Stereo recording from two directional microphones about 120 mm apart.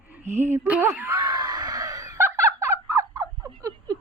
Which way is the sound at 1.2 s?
35° right (ahead or behind).